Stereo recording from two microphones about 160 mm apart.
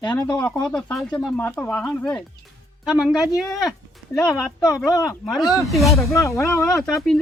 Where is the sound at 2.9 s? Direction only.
Centre (ahead or behind).